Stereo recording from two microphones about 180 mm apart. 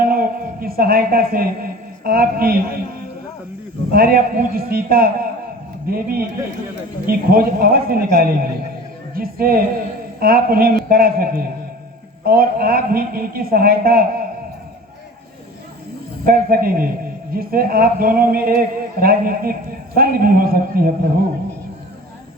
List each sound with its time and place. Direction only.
0.0 s music: 55° right (ahead or behind)
3.9 s a man's voice: 55° right (ahead or behind)
16.2 s a man's voice: 55° right (ahead or behind)